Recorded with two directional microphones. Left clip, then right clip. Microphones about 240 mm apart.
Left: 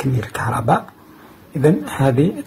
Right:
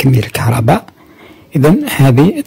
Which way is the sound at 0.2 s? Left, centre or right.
Right.